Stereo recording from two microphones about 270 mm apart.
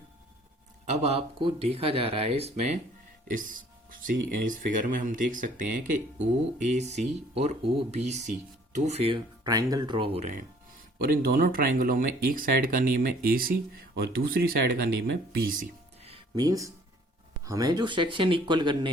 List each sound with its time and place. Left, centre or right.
0.9 s speech: right
16.0 s music: centre
17.4 s speech: centre